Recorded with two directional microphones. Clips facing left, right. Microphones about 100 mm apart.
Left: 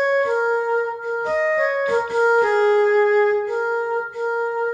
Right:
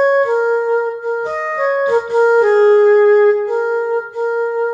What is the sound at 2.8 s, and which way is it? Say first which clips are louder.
Music: right 7 dB; 25° right (ahead or behind).